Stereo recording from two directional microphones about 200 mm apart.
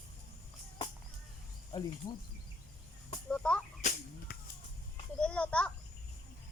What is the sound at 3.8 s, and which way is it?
Whip, 40° left (ahead or behind).